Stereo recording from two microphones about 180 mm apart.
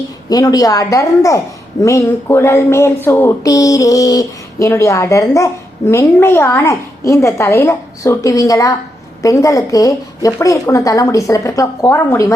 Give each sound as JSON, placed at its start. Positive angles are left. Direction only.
{"t": 0.3, "sound": "speech", "side_deg": 20}